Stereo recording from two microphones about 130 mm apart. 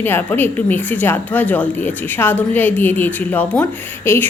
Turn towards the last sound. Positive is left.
turn(degrees=15)  # may be behind; listen again after turning